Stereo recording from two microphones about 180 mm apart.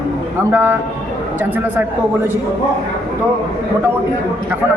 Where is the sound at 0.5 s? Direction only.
10° right (ahead or behind).